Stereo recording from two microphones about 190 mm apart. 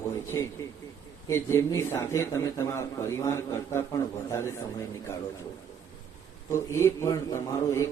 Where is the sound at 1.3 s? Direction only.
15° left (ahead or behind).